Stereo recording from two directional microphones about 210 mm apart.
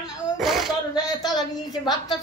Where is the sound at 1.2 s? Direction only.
20° left (ahead or behind).